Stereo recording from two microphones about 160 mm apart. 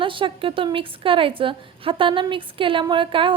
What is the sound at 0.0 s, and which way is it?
A woman's voice, 30° right (ahead or behind).